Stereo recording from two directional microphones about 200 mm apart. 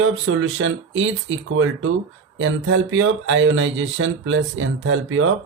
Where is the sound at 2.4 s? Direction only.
75° right (ahead or behind).